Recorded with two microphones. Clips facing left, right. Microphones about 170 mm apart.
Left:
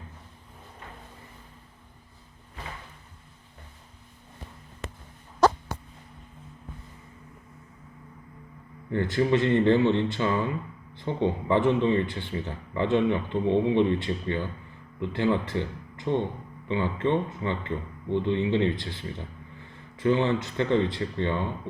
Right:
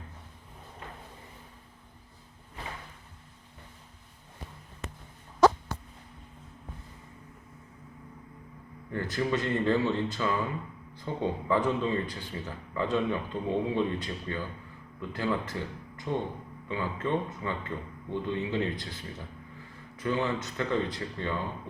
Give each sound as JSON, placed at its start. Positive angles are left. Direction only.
{"t": 4.8, "sound": "hiccup", "side_deg": 90}
{"t": 8.9, "sound": "speech", "side_deg": 25}